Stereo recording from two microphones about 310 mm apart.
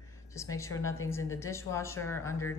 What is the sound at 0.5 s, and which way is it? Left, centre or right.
Speech, centre.